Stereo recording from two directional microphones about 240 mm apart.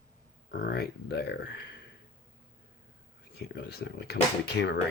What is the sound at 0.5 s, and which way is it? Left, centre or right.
Speech, left.